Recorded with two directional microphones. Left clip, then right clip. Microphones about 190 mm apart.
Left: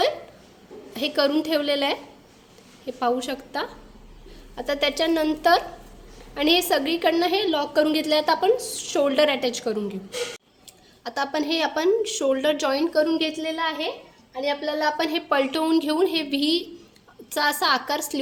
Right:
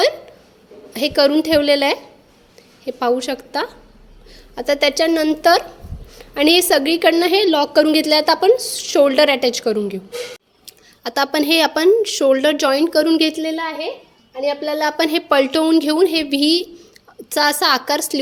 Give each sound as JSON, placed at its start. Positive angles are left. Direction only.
{"t": 0.9, "sound": "speech", "side_deg": -35}